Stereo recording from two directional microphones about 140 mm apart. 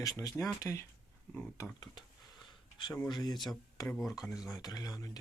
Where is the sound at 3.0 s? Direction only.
30° left (ahead or behind).